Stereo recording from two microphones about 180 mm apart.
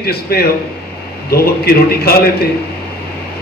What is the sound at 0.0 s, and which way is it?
A man's voice, 60° left (ahead or behind).